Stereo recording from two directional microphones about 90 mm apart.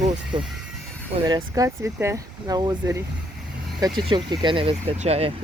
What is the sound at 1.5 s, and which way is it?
Speech, 35° right (ahead or behind).